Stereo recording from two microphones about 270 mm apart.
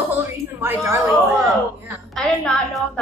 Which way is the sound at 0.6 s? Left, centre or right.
Centre.